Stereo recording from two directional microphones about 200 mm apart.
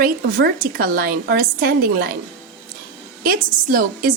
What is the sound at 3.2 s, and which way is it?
Speech, 45° right (ahead or behind).